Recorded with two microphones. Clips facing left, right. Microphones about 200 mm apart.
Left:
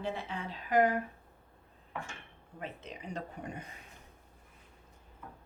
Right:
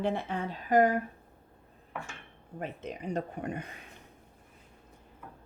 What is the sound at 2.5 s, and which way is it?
Speech, 50° right (ahead or behind).